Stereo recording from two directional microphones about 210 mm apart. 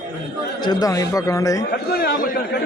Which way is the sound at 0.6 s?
20° left (ahead or behind).